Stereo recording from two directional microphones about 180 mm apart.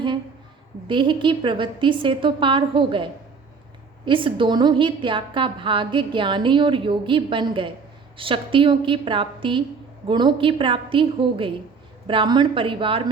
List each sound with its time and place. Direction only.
0.9 s a woman's voice: 25° right (ahead or behind)